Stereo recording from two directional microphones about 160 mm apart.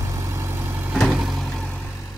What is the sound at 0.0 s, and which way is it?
Vehicle, 20° right (ahead or behind).